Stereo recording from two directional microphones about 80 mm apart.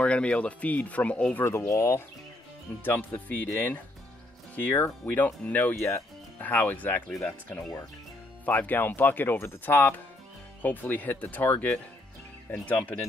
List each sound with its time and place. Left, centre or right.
0.0 s speech: centre
1.4 s speech: left
2.8 s speech: left
5.8 s speech: left
6.4 s speech: left